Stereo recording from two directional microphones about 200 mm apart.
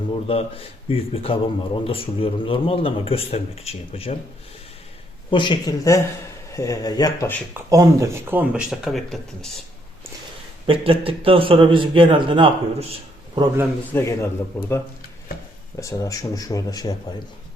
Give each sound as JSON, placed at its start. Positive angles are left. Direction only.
{"t": 0.3, "sound": "a man's voice", "side_deg": 30}
{"t": 5.3, "sound": "a man's voice", "side_deg": 25}
{"t": 7.5, "sound": "speech", "side_deg": -15}
{"t": 10.7, "sound": "a man's voice", "side_deg": -30}
{"t": 12.9, "sound": "a sound", "side_deg": -20}
{"t": 13.9, "sound": "speech", "side_deg": 15}
{"t": 15.8, "sound": "speech", "side_deg": 15}